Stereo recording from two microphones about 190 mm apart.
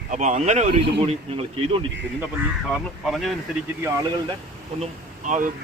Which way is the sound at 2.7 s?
Centre (ahead or behind).